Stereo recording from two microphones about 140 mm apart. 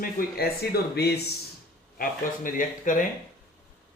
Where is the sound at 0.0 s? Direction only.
90° left.